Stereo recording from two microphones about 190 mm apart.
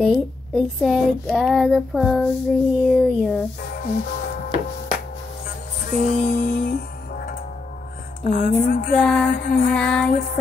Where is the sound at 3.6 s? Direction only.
50° left (ahead or behind).